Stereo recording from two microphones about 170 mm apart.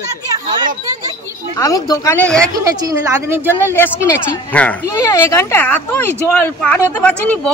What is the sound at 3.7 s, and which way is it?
Speech, 15° left (ahead or behind).